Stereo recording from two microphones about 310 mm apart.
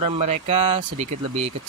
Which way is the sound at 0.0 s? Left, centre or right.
Right.